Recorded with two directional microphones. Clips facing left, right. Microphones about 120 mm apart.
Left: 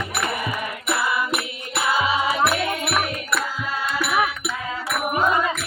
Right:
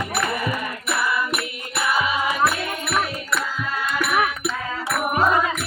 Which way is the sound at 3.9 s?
30° left (ahead or behind).